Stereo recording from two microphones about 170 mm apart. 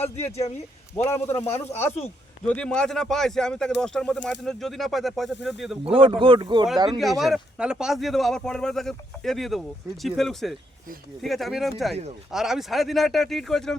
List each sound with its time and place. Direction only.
0.0 s speech: 40° left (ahead or behind)
0.9 s speech: 10° left (ahead or behind)
1.4 s speech: 40° left (ahead or behind)
1.6 s speech: 15° left (ahead or behind); by 5.9 s centre (ahead or behind)
5.9 s speech: 30° right (ahead or behind)
7.2 s speech: centre (ahead or behind)